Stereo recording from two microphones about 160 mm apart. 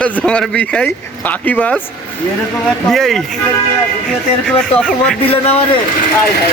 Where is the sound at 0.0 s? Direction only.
5° left (ahead or behind).